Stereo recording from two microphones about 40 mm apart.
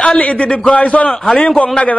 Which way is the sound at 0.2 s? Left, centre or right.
Left.